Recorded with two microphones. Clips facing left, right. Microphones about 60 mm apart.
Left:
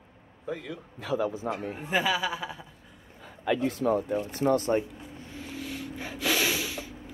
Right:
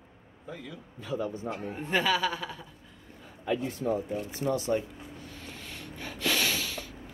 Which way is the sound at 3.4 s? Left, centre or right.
Left.